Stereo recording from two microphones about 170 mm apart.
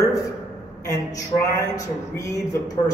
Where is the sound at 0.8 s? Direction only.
20° left (ahead or behind).